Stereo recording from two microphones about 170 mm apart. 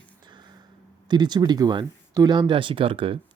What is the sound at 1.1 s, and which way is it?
Speech, 25° right (ahead or behind).